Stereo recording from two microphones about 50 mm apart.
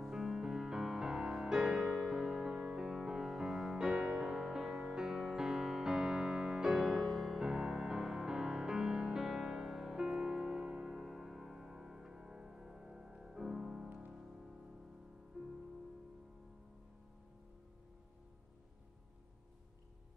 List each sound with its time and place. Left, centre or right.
0.1 s music: centre
11.0 s music: centre